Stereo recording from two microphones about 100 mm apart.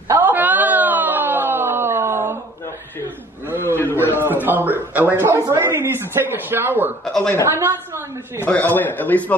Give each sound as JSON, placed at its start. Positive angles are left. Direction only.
{"t": 0.1, "sound": "wail", "side_deg": -20}
{"t": 3.5, "sound": "a sound", "side_deg": 20}
{"t": 4.1, "sound": "a man's voice", "side_deg": -20}
{"t": 7.1, "sound": "a man's voice", "side_deg": 10}
{"t": 7.5, "sound": "a woman's voice", "side_deg": -25}
{"t": 8.5, "sound": "a man's voice", "side_deg": 15}